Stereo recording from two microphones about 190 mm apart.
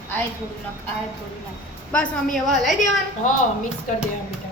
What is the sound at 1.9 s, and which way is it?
Speech, centre (ahead or behind).